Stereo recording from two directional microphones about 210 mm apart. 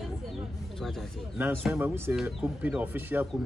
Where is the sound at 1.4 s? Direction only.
10° right (ahead or behind).